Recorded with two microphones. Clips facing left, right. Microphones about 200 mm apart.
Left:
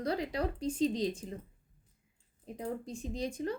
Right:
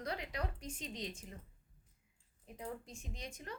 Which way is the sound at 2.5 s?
30° left (ahead or behind).